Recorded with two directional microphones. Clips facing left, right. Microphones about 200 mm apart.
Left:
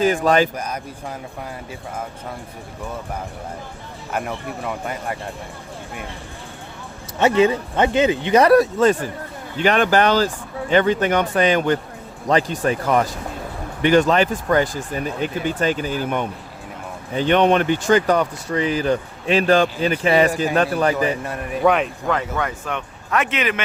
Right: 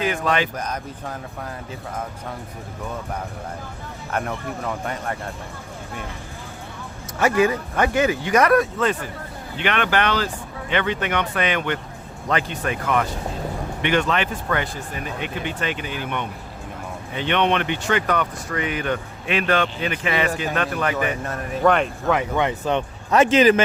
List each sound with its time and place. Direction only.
0.2 s speech: 40° left (ahead or behind)
0.5 s speech: 10° left (ahead or behind)
4.1 s speech: 5° left (ahead or behind)
7.2 s speech: 25° left (ahead or behind)
21.2 s speech: 10° left (ahead or behind)
22.1 s speech: 15° right (ahead or behind); by 23.6 s 30° right (ahead or behind)